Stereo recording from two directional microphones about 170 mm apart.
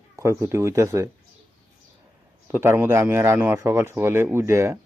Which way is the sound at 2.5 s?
15° right (ahead or behind).